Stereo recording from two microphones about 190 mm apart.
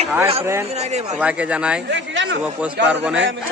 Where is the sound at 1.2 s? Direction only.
5° right (ahead or behind).